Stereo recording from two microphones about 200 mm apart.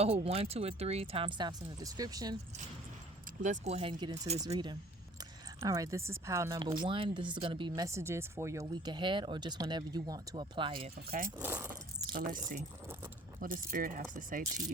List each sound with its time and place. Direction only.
0.0 s speech: 30° right (ahead or behind)
3.4 s speech: 35° right (ahead or behind)
11.3 s a sound: 10° right (ahead or behind)
12.1 s speech: 40° right (ahead or behind)